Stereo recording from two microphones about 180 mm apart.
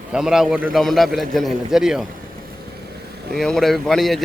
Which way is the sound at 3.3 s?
Centre (ahead or behind).